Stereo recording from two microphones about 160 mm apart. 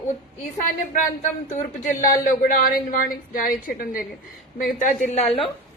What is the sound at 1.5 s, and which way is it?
Speech, 55° left (ahead or behind).